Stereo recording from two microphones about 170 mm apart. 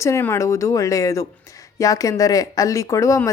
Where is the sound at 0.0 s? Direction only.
15° left (ahead or behind).